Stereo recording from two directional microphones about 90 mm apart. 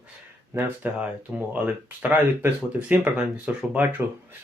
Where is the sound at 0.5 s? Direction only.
15° right (ahead or behind).